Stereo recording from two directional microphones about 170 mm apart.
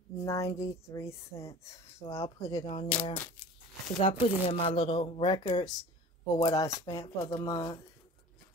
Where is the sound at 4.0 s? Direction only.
35° left (ahead or behind).